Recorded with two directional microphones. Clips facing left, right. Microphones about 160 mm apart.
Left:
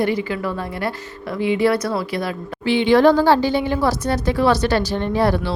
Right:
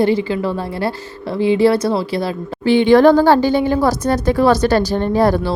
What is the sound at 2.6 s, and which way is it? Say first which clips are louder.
A woman's voice: right 4 dB; 45° right (ahead or behind).